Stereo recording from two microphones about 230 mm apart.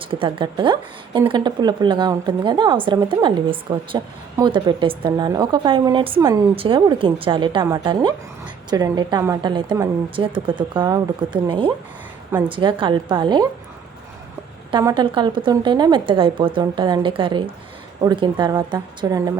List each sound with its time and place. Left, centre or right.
0.0 s a woman's voice: right
14.7 s a woman's voice: centre